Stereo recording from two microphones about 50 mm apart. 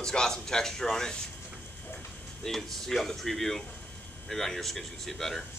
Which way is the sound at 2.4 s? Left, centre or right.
Centre.